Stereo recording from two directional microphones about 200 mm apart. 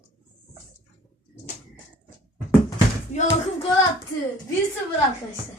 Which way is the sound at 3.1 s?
25° left (ahead or behind).